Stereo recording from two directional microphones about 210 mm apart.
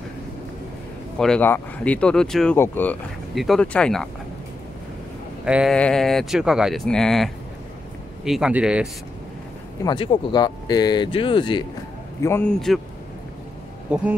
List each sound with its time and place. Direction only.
1.1 s speech: 5° left (ahead or behind)
5.4 s speech: 5° right (ahead or behind)
9.8 s speech: 20° left (ahead or behind)
12.2 s speech: 10° left (ahead or behind)
13.8 s speech: 5° right (ahead or behind)